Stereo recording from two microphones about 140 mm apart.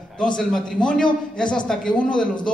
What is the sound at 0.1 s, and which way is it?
A woman's voice, 5° left (ahead or behind).